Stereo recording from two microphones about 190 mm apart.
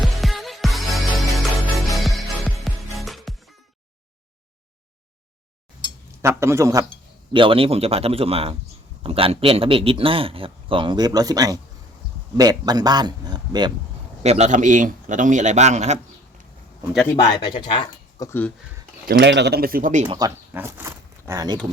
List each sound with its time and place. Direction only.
0.0 s music: centre (ahead or behind)
6.2 s a man's voice: 15° right (ahead or behind)
7.3 s a man's voice: 25° right (ahead or behind)
14.2 s a man's voice: 35° right (ahead or behind)
17.4 s speech: 25° left (ahead or behind)
18.3 s speech: 10° left (ahead or behind)
19.0 s speech: 65° right (ahead or behind); by 20.1 s 40° right (ahead or behind)
20.1 s speech: 20° right (ahead or behind)